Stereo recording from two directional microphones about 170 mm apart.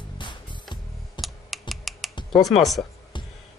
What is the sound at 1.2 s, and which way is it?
Computer keyboard, centre (ahead or behind).